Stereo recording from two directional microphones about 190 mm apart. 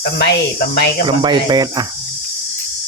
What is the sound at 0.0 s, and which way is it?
Speech, 60° left (ahead or behind).